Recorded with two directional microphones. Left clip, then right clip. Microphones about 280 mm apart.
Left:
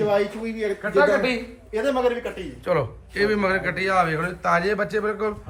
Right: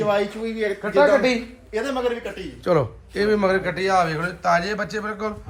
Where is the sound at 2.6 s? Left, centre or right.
Centre.